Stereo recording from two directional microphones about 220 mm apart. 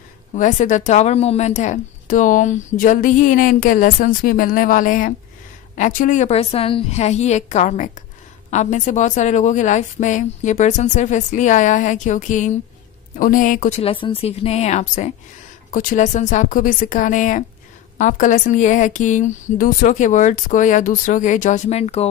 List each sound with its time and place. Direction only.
0.3 s a woman's voice: 35° left (ahead or behind)